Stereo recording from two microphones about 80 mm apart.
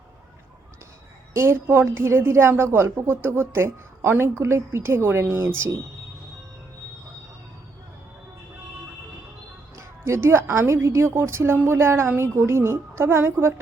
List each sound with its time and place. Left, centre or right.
1.3 s a woman's voice: right
9.7 s a woman's voice: right